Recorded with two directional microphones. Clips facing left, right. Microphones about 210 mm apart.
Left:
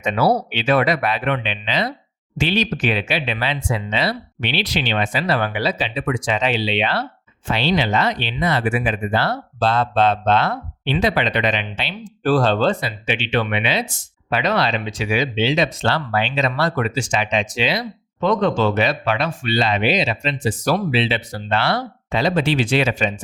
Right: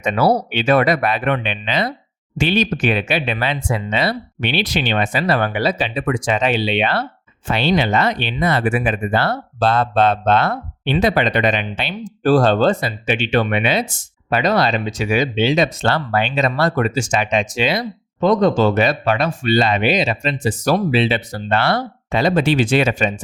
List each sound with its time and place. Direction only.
0.0 s speech: 50° right (ahead or behind)